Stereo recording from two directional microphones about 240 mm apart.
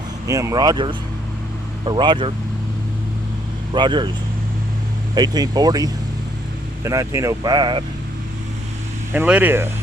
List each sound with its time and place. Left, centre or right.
0.3 s speech: centre
3.8 s speech: centre
5.1 s speech: centre
9.1 s speech: centre